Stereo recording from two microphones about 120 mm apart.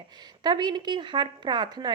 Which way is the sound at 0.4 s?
40° right (ahead or behind).